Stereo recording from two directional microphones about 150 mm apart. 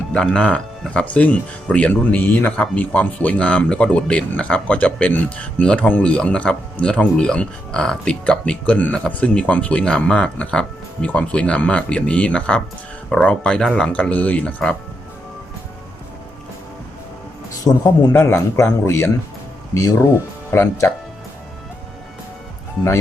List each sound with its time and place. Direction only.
0.1 s speech: 5° left (ahead or behind)
18.1 s speech: 15° left (ahead or behind)